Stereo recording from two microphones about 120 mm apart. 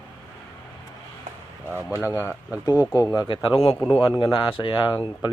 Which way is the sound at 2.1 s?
20° left (ahead or behind).